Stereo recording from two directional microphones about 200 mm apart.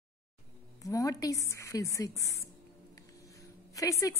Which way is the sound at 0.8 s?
15° left (ahead or behind).